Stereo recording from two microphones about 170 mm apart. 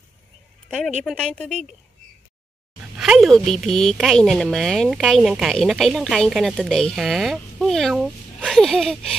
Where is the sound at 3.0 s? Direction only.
Centre (ahead or behind).